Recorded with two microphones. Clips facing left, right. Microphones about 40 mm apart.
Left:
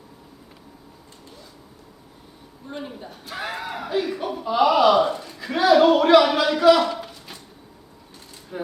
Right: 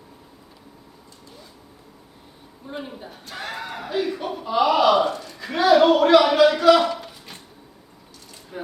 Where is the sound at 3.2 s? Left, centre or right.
Centre.